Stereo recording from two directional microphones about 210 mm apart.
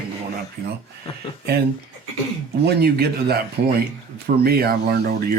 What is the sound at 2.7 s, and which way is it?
Speech, 50° right (ahead or behind).